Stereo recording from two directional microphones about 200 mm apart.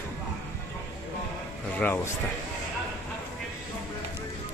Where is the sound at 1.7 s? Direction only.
10° left (ahead or behind).